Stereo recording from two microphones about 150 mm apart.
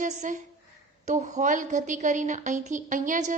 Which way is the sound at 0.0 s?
55° right (ahead or behind).